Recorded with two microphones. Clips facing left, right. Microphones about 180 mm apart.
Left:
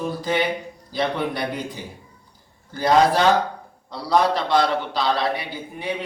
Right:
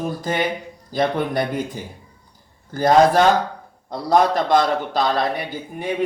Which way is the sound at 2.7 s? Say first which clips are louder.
Right 3 dB; 50° right (ahead or behind).